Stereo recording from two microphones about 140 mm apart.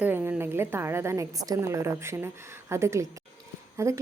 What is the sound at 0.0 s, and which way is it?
A woman's voice, 15° right (ahead or behind).